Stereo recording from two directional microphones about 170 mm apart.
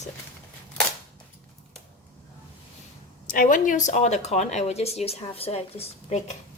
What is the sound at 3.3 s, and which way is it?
Speech, 50° left (ahead or behind).